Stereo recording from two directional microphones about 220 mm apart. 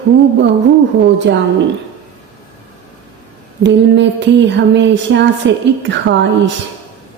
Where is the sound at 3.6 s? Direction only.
55° right (ahead or behind).